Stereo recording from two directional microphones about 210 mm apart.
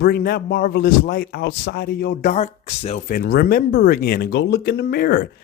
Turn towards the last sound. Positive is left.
turn(degrees=50)  # may be behind; listen again after turning